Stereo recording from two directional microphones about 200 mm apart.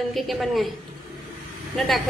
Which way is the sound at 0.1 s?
Centre (ahead or behind).